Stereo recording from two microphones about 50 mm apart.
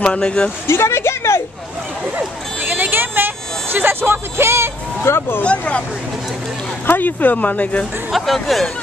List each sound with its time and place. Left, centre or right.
0.0 s speech: centre
0.7 s a sound: left
2.1 s a sound: right
3.7 s speech: right
5.0 s speech: left
5.4 s speech: left
6.9 s speech: left
8.1 s speech: centre